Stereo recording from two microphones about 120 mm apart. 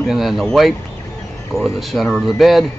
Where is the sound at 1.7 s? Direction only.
Centre (ahead or behind).